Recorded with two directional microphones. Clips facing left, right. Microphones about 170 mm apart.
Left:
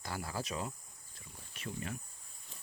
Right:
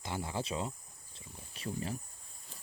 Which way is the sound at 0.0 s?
20° right (ahead or behind).